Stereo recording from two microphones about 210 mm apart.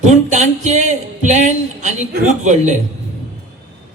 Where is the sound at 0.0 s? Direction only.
35° right (ahead or behind).